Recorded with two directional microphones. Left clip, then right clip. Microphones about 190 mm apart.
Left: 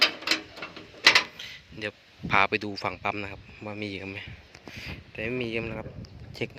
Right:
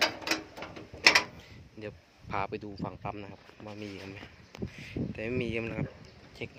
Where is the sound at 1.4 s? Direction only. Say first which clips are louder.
Left 9 dB; 5° right (ahead or behind).